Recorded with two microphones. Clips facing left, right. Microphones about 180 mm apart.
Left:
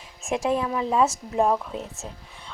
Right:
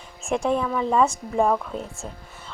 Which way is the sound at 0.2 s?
Centre (ahead or behind).